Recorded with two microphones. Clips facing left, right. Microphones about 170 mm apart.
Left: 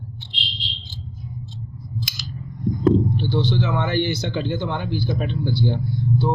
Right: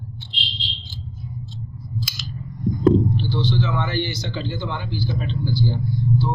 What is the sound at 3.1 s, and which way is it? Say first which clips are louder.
Speech: left 1 dB; 55° left (ahead or behind).